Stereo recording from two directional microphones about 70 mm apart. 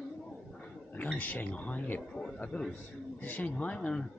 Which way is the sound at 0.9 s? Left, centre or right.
Left.